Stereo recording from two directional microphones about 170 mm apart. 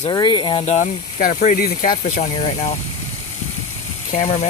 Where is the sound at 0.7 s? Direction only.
45° left (ahead or behind).